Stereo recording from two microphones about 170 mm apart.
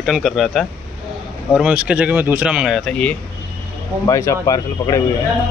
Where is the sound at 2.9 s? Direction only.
10° left (ahead or behind).